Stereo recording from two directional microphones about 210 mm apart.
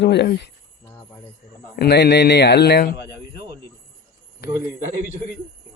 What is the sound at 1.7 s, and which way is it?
A man's voice, 50° left (ahead or behind).